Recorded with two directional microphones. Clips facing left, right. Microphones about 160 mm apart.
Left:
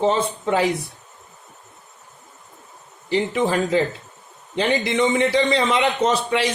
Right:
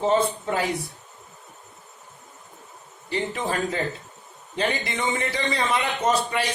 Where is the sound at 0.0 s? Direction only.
90° left.